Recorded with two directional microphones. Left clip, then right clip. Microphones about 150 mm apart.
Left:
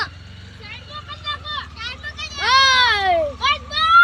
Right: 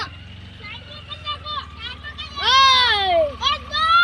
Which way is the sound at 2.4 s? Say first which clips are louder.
Even; 20° left (ahead or behind).